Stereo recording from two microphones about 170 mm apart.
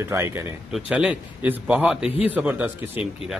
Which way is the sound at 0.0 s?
15° right (ahead or behind).